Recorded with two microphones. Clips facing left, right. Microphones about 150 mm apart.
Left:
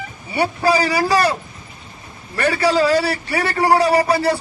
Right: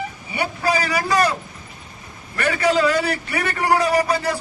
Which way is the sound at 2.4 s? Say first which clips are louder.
Left 2 dB; 35° left (ahead or behind).